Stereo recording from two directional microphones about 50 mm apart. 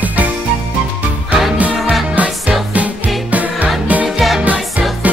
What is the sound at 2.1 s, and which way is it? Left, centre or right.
Music, right.